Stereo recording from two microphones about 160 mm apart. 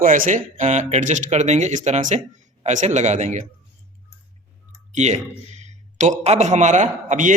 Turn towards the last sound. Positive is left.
turn(degrees=-50)  # may be behind; listen again after turning